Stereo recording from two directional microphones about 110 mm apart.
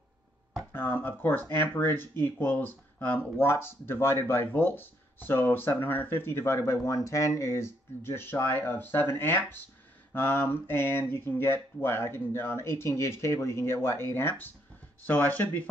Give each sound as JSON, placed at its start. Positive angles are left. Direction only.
{"t": 0.7, "sound": "speech", "side_deg": 20}